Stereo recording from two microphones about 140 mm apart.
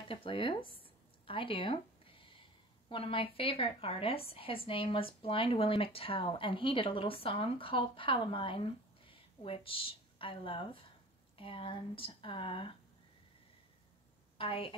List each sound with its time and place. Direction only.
0.1 s speech: 40° left (ahead or behind)
1.2 s a sound: 40° left (ahead or behind)
2.9 s speech: 40° left (ahead or behind)
14.4 s speech: 40° left (ahead or behind)